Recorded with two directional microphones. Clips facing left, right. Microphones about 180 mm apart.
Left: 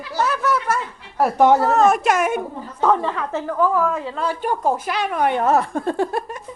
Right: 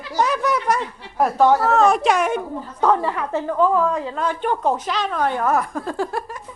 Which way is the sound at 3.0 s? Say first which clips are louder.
Right 1 dB; 15° right (ahead or behind).